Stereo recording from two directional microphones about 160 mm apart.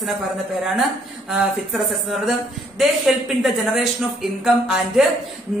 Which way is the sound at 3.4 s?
Centre (ahead or behind).